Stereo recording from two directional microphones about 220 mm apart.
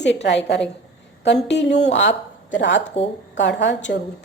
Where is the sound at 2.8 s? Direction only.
25° left (ahead or behind).